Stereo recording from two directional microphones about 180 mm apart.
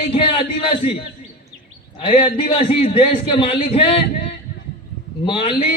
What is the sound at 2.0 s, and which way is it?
A man's voice, 30° left (ahead or behind).